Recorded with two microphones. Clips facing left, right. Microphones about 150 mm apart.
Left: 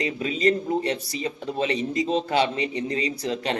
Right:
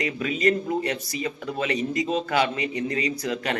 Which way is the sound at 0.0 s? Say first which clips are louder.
Left 1 dB; 30° left (ahead or behind).